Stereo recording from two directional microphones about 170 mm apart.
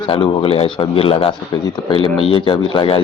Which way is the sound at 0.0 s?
30° left (ahead or behind).